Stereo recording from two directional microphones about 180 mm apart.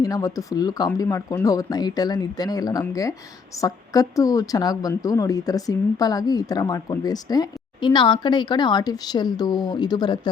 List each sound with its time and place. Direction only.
0.0 s speech: 20° left (ahead or behind)